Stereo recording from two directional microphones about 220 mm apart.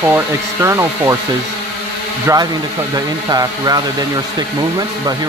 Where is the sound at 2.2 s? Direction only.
15° right (ahead or behind).